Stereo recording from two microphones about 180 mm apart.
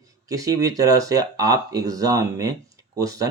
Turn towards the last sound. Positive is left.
turn(degrees=-20)  # may be behind; listen again after turning